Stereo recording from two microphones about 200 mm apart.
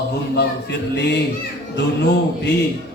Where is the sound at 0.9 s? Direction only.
55° left (ahead or behind).